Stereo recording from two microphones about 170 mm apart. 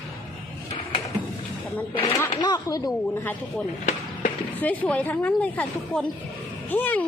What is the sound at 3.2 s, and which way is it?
A woman's voice, 10° left (ahead or behind).